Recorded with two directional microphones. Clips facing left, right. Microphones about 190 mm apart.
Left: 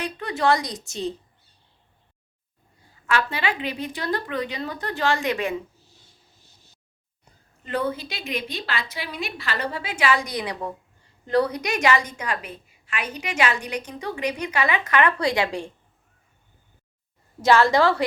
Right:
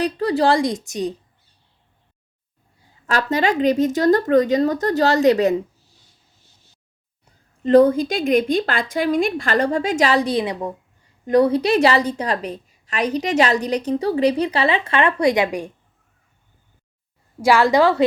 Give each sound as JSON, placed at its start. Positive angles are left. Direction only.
{"t": 0.0, "sound": "speech", "side_deg": -35}
{"t": 3.1, "sound": "a woman's voice", "side_deg": -40}
{"t": 7.6, "sound": "a woman's voice", "side_deg": -40}
{"t": 17.4, "sound": "a woman's voice", "side_deg": -15}